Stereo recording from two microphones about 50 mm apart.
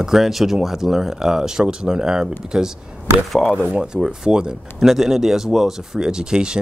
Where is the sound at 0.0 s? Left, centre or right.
Centre.